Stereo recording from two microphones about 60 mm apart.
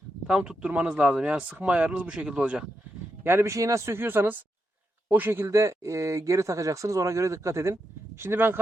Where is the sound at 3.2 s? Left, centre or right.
Right.